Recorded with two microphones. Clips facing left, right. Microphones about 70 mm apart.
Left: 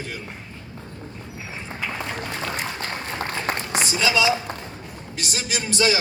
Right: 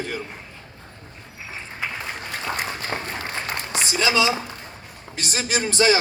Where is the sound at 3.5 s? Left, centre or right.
Left.